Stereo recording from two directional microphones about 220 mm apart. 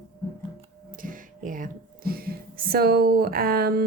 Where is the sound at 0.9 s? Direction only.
40° right (ahead or behind).